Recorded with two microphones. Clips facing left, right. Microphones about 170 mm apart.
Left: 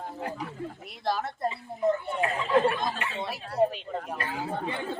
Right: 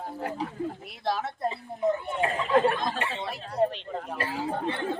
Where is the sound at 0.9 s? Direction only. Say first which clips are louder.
Left 4 dB; centre (ahead or behind).